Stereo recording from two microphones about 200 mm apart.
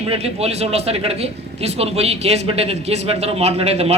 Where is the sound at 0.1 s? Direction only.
30° right (ahead or behind).